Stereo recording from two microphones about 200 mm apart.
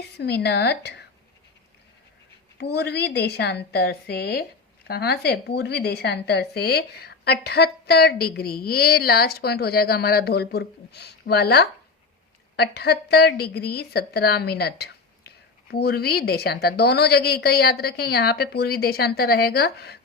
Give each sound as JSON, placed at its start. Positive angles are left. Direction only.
{"t": 0.2, "sound": "a woman's voice", "side_deg": 55}
{"t": 2.6, "sound": "a woman's voice", "side_deg": 55}